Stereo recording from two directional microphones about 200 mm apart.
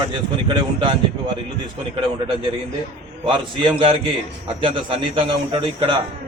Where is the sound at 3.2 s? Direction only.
25° right (ahead or behind).